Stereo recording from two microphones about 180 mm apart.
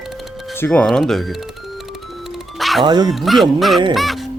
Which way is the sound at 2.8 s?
25° right (ahead or behind).